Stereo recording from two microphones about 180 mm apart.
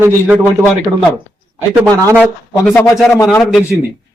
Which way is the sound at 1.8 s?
15° right (ahead or behind).